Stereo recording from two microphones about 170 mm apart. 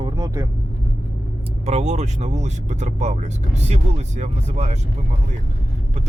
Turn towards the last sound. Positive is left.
turn(degrees=-40)  # may be behind; listen again after turning